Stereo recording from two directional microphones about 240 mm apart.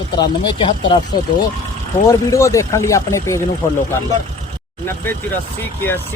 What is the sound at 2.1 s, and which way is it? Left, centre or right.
Speech, centre.